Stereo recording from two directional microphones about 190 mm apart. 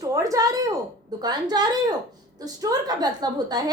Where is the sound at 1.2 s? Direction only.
20° right (ahead or behind).